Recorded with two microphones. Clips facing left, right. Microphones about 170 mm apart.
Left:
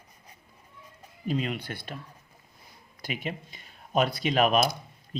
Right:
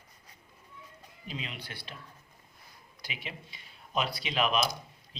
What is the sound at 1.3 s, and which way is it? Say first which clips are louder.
Speech: left 11 dB; 45° left (ahead or behind).